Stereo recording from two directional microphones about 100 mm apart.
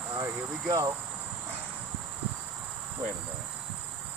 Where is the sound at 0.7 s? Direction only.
35° right (ahead or behind).